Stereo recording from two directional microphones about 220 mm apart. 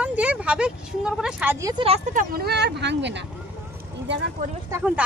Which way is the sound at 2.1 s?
45° right (ahead or behind).